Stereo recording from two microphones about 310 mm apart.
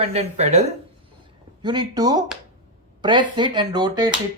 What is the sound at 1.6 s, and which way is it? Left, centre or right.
Speech, centre.